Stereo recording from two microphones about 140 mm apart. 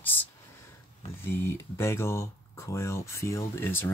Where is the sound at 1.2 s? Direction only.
15° left (ahead or behind).